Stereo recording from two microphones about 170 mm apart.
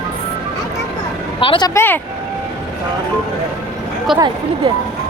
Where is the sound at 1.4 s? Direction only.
30° left (ahead or behind).